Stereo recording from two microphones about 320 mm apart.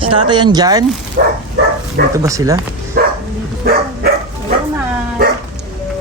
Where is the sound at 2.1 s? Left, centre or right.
Centre.